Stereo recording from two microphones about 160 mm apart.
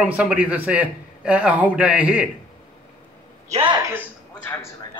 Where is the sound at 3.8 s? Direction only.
15° right (ahead or behind).